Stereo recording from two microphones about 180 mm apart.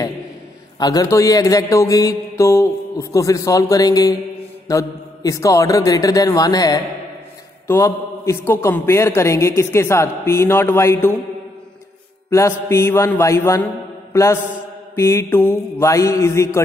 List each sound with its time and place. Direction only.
0.7 s a man's voice: 20° left (ahead or behind)
12.3 s a man's voice: 15° left (ahead or behind)